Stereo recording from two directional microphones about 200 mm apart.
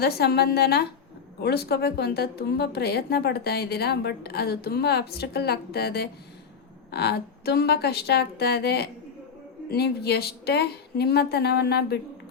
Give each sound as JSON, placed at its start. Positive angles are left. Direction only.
{"t": 0.0, "sound": "a woman's voice", "side_deg": 55}